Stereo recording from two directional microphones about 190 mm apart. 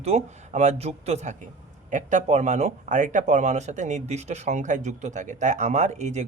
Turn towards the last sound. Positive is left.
turn(degrees=-35)  # may be behind; listen again after turning